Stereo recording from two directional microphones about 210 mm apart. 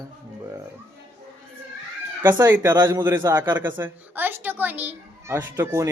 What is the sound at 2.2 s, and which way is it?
Speech, 10° right (ahead or behind).